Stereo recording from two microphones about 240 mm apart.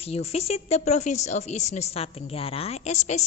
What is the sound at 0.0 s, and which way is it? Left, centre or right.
A woman's voice, left.